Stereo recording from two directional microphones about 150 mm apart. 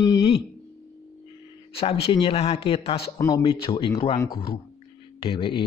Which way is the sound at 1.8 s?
40° left (ahead or behind).